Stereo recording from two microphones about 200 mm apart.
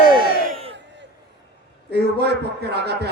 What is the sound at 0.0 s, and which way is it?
Crowd, 45° left (ahead or behind).